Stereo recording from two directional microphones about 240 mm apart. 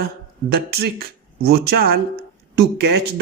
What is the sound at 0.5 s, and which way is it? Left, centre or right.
Speech, right.